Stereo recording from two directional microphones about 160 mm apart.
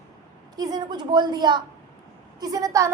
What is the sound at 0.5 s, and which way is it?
A woman's voice, 25° right (ahead or behind).